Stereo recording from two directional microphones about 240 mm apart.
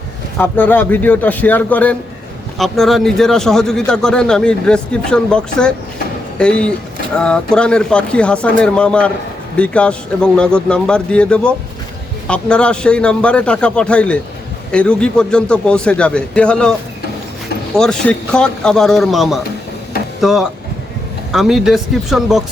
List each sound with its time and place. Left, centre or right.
0.3 s a man's voice: centre
17.7 s a man's voice: centre